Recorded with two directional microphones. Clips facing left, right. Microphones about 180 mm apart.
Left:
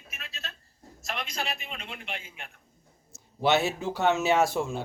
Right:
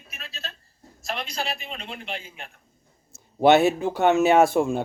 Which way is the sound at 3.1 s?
55° right (ahead or behind).